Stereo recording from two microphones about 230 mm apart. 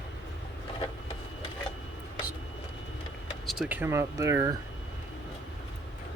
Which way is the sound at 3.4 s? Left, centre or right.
Centre.